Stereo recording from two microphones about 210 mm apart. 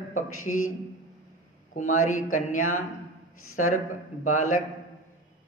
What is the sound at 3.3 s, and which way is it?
Speech, 90° left.